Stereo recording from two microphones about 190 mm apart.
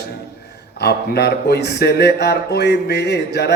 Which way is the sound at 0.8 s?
60° left (ahead or behind).